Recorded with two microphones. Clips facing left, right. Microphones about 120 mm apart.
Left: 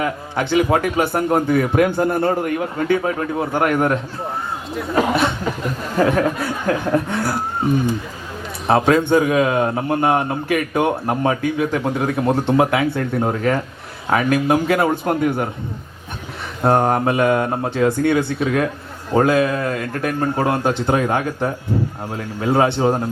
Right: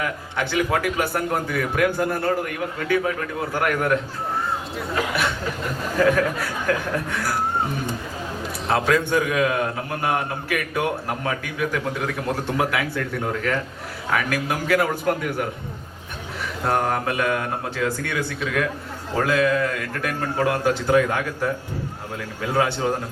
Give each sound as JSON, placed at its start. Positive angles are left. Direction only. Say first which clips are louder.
{"t": 0.0, "sound": "a man's voice", "louder": "left 5 dB", "side_deg": 25}
{"t": 6.1, "sound": "a man's voice", "louder": "left 2 dB", "side_deg": 25}
{"t": 8.6, "sound": "a man's voice", "louder": "left 6 dB", "side_deg": 25}
{"t": 16.6, "sound": "a man's voice", "louder": "left 7 dB", "side_deg": 30}